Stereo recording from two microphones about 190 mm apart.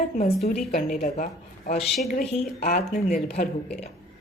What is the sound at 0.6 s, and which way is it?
A woman's voice, 45° left (ahead or behind).